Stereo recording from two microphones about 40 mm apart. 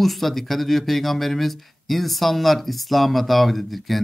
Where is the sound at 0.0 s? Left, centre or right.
Centre.